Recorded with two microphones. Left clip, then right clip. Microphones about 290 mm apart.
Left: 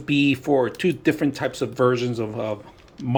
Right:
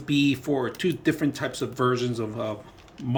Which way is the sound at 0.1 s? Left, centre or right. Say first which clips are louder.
Left 4 dB; centre.